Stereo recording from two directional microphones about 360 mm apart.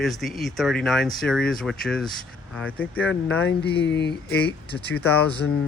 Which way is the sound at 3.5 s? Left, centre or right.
Left.